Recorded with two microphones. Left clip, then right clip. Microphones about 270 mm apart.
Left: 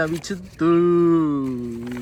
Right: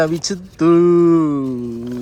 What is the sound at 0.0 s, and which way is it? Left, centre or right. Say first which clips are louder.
Speech: right 6 dB; centre.